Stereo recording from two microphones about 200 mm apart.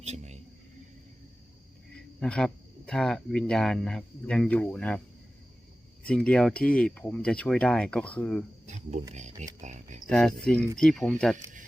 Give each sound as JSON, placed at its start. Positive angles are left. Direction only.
{"t": 0.0, "sound": "music", "side_deg": -35}
{"t": 1.9, "sound": "speech", "side_deg": 5}
{"t": 6.0, "sound": "speech", "side_deg": 5}
{"t": 8.6, "sound": "speech", "side_deg": -35}
{"t": 10.1, "sound": "speech", "side_deg": 5}